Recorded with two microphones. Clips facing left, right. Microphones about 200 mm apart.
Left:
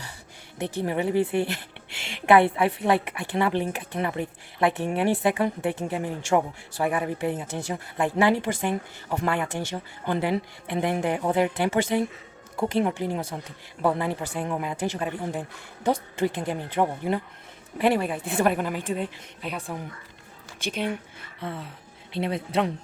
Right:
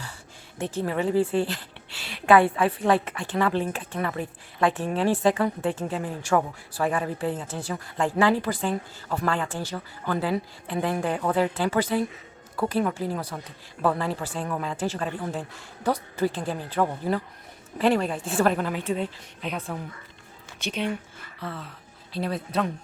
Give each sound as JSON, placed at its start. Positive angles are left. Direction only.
{"t": 0.8, "sound": "a woman's voice", "side_deg": 15}
{"t": 20.6, "sound": "a woman's voice", "side_deg": 50}
{"t": 22.1, "sound": "speech", "side_deg": 25}